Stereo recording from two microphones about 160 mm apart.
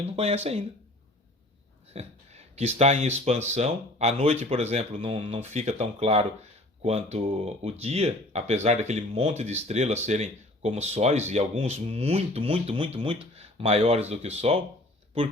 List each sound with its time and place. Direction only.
0.0 s speech: 40° right (ahead or behind)
1.9 s speech: 40° right (ahead or behind)